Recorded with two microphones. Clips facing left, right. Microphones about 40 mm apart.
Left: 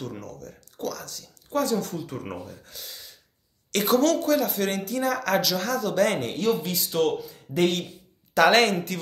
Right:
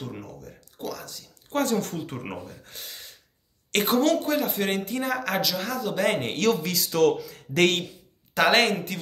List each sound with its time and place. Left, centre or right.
0.0 s speech: centre
1.5 s speech: right
3.7 s a woman's voice: right
4.0 s speech: right
5.2 s speech: centre
6.3 s speech: right
8.4 s speech: centre